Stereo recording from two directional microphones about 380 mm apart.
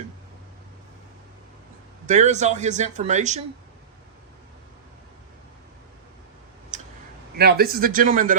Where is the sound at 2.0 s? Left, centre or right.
Centre.